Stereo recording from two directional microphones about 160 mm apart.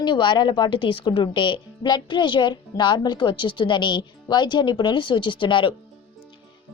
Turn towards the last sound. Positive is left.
turn(degrees=30)  # may be behind; listen again after turning